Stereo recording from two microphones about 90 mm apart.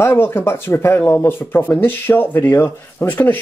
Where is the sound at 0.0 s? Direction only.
25° left (ahead or behind).